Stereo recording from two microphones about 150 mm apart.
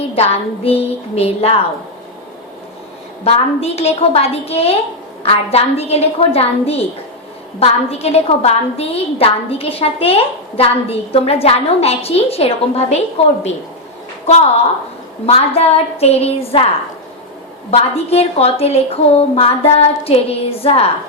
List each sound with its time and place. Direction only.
0.2 s a woman's voice: 40° left (ahead or behind)
3.2 s a woman's voice: 45° left (ahead or behind)
17.7 s a woman's voice: 45° left (ahead or behind)